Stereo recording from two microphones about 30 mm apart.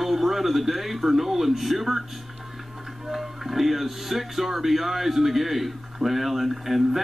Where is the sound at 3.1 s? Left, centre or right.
Centre.